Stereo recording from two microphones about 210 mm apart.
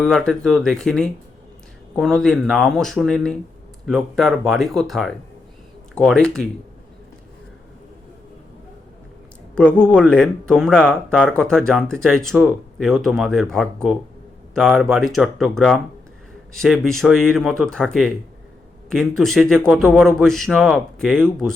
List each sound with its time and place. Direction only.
0.0 s speech: centre (ahead or behind)
9.6 s speech: 5° left (ahead or behind)